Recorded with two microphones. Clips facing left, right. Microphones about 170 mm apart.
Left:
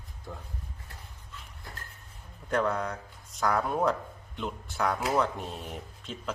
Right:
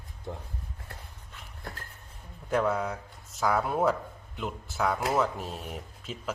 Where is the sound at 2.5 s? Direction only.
5° right (ahead or behind).